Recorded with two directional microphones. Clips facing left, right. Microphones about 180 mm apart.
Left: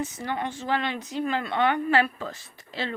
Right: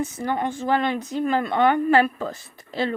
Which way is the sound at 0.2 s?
45° right (ahead or behind).